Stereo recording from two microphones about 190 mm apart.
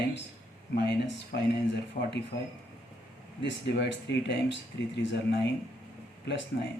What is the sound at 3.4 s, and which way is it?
Speech, 70° left (ahead or behind).